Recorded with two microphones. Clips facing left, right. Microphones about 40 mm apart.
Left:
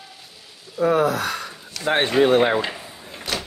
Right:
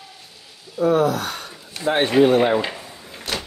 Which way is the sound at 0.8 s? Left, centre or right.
Centre.